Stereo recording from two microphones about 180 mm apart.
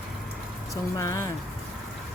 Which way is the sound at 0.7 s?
15° left (ahead or behind).